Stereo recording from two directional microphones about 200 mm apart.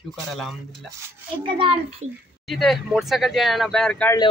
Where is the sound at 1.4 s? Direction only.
25° right (ahead or behind).